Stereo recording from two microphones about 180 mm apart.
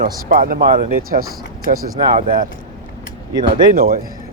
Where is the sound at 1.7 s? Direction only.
50° right (ahead or behind).